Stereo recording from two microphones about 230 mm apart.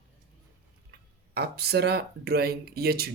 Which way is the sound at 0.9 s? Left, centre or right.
Right.